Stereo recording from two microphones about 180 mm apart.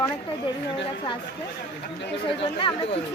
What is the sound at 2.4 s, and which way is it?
Speech, 30° left (ahead or behind).